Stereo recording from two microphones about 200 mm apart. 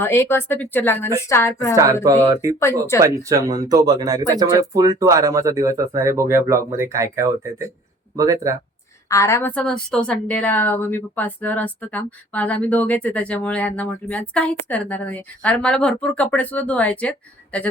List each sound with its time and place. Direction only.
0.0 s a woman's voice: 10° left (ahead or behind)
1.7 s speech: 15° right (ahead or behind)
9.0 s a woman's voice: 15° left (ahead or behind)